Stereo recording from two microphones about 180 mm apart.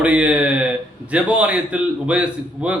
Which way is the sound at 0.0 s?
10° right (ahead or behind).